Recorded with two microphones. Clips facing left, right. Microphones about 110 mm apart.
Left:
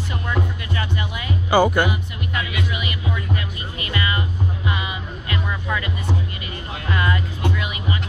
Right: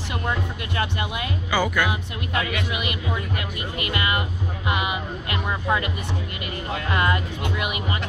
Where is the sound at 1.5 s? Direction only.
35° left (ahead or behind).